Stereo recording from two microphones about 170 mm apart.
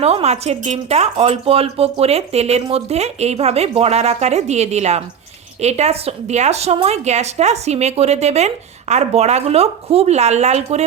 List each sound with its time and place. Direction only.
0.0 s a woman's voice: 35° right (ahead or behind)